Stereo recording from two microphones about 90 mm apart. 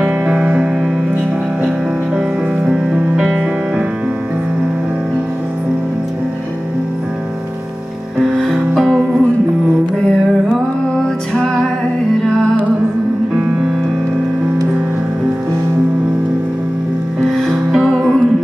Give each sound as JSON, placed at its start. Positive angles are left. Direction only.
{"t": 0.0, "sound": "music", "side_deg": -15}
{"t": 2.1, "sound": "music", "side_deg": -10}
{"t": 8.4, "sound": "music", "side_deg": 0}
{"t": 13.4, "sound": "music", "side_deg": -15}
{"t": 17.2, "sound": "music", "side_deg": 0}